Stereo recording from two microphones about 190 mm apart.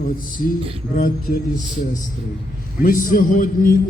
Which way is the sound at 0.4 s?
40° left (ahead or behind).